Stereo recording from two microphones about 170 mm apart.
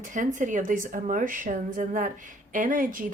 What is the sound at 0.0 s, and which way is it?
Speech, 50° right (ahead or behind).